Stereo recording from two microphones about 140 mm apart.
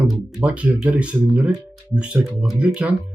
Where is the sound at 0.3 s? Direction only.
10° right (ahead or behind).